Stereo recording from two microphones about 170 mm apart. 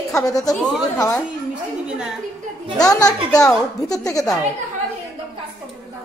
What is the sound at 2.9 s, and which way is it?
A woman's voice, 20° left (ahead or behind).